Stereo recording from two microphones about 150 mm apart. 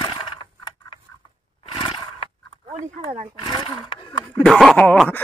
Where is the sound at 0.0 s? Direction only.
30° left (ahead or behind).